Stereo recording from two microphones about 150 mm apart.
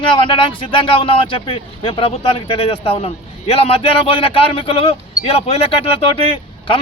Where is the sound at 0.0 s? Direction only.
35° left (ahead or behind).